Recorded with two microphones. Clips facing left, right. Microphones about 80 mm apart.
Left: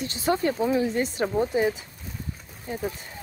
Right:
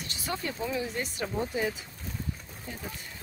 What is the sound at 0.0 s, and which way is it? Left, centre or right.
Speech, left.